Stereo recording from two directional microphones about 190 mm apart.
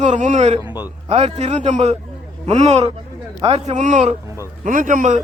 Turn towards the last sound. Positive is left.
turn(degrees=-40)  # may be behind; listen again after turning